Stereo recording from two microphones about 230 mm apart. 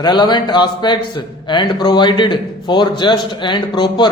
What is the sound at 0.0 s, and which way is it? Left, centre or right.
A man's voice, centre.